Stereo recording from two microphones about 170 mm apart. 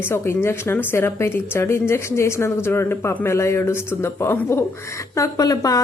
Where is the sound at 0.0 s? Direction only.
15° left (ahead or behind).